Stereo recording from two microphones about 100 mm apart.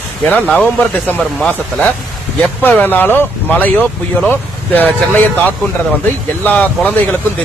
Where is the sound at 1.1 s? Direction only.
10° left (ahead or behind).